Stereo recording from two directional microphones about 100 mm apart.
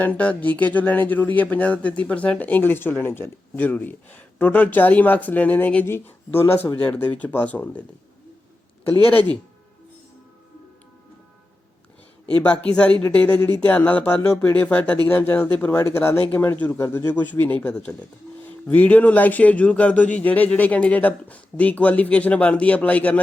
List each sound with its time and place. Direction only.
0.0 s speech: 15° left (ahead or behind)
9.0 s speech: 15° left (ahead or behind)
12.4 s speech: 10° left (ahead or behind)